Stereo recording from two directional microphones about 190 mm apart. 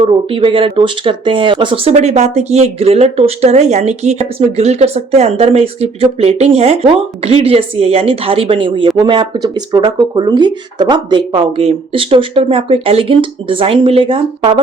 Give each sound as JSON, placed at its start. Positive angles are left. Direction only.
{"t": 0.0, "sound": "speech", "side_deg": -30}